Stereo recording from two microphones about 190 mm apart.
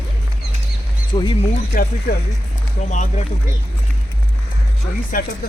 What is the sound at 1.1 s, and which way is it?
Speech, 25° left (ahead or behind).